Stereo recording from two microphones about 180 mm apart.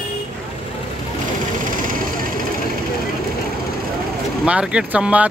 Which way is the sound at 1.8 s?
50° right (ahead or behind).